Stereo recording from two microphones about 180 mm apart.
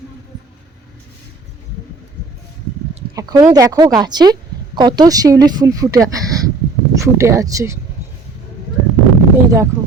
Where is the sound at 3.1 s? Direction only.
20° right (ahead or behind).